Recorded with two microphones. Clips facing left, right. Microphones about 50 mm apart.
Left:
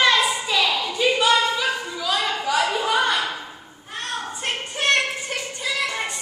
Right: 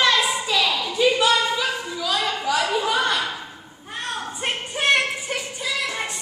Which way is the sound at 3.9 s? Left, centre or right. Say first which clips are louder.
Even; centre.